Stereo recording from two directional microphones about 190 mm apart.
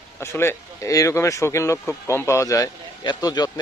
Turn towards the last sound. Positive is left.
turn(degrees=20)  # may be behind; listen again after turning